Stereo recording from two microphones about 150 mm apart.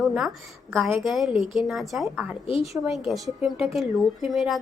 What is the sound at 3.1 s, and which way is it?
A woman's voice, 5° right (ahead or behind).